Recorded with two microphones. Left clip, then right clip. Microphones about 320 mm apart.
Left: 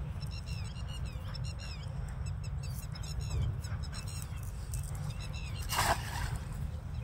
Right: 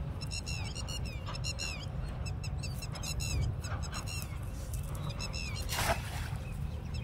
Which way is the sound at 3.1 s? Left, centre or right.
Right.